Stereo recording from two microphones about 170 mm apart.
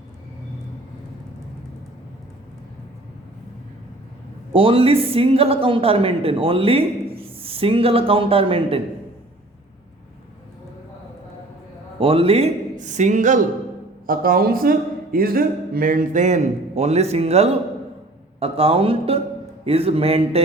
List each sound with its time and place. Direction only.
4.5 s a woman's voice: 30° right (ahead or behind)
11.9 s a man's voice: 35° right (ahead or behind)